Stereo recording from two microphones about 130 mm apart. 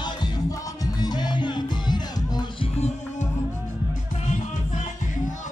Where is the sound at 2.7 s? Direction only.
60° left (ahead or behind).